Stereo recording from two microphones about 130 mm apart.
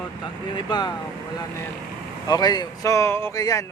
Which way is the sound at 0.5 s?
35° left (ahead or behind).